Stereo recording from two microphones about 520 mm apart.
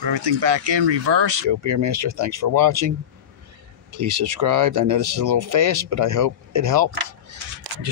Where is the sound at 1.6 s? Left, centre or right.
Right.